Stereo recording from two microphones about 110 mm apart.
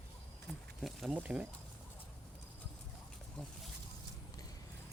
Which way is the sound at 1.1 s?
15° right (ahead or behind).